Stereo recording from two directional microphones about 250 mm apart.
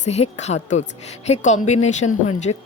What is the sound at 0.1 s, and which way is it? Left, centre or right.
Speech, left.